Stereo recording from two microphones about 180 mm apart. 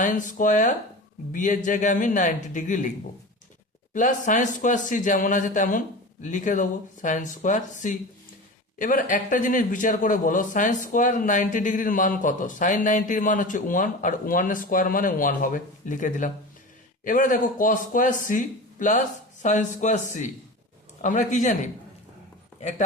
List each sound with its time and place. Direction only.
0.0 s speech: 45° left (ahead or behind)
3.9 s speech: 45° left (ahead or behind)